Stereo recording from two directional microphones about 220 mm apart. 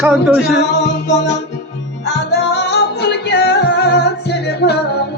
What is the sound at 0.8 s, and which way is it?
Music, 55° left (ahead or behind).